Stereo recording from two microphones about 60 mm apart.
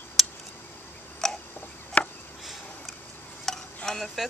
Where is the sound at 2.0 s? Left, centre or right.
Left.